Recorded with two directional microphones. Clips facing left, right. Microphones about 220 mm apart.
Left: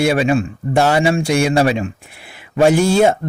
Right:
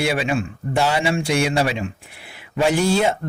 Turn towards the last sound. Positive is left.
turn(degrees=45)  # may be behind; listen again after turning